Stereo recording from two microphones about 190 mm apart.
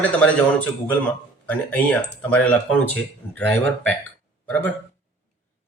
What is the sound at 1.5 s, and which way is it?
Speech, 10° left (ahead or behind).